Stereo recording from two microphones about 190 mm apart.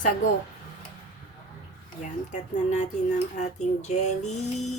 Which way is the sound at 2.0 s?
40° left (ahead or behind).